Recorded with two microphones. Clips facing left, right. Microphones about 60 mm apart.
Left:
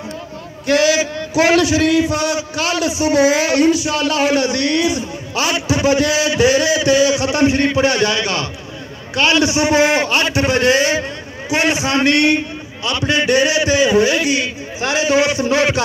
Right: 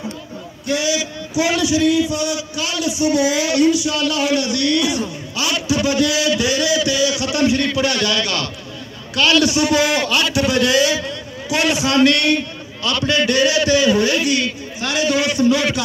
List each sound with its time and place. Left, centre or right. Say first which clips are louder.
0.7 s a sound: left 6 dB; left
0.9 s a man's voice: left 4 dB; left; by 15.5 s centre
15.5 s a man's voice: left 3 dB; left